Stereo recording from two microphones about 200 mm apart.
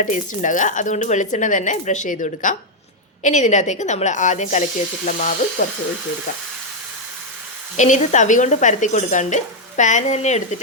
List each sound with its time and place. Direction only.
0.0 s speech: 40° left (ahead or behind)
7.8 s speech: 35° left (ahead or behind)